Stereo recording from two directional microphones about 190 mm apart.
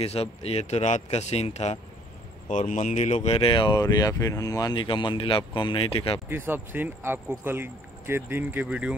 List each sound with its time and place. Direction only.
0.0 s speech: 30° left (ahead or behind)
6.2 s speech: 10° right (ahead or behind)